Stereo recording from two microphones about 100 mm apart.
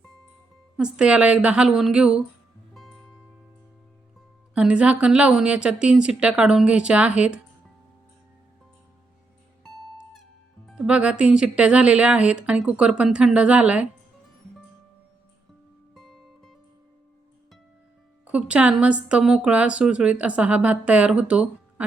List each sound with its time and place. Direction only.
0.8 s a woman's voice: 10° right (ahead or behind)
2.7 s music: centre (ahead or behind)
4.5 s a woman's voice: 10° right (ahead or behind)
9.6 s music: 5° left (ahead or behind)
10.7 s a woman's voice: 10° right (ahead or behind)
16.0 s music: centre (ahead or behind)
18.3 s a woman's voice: 10° right (ahead or behind)